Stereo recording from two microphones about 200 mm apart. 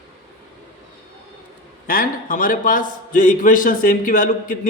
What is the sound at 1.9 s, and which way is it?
A man's voice, 45° left (ahead or behind).